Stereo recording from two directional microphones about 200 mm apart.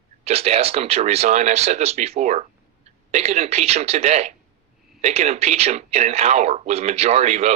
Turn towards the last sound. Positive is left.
turn(degrees=-35)  # may be behind; listen again after turning